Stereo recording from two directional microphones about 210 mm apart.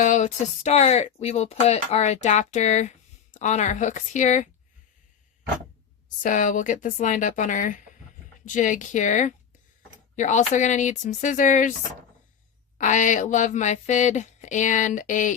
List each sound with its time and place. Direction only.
0.0 s speech: 35° left (ahead or behind)
6.2 s speech: 35° left (ahead or behind)
12.8 s speech: 35° left (ahead or behind)